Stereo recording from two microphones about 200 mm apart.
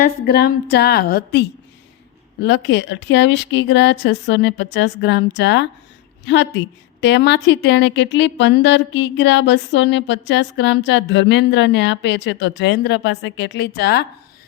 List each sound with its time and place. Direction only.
0.0 s a woman's voice: 50° left (ahead or behind)
2.4 s a woman's voice: 60° left (ahead or behind)